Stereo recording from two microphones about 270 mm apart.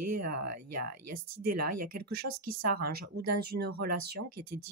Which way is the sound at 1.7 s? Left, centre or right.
Right.